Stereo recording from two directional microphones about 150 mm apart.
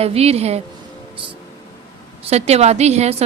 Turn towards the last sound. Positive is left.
turn(degrees=-45)  # may be behind; listen again after turning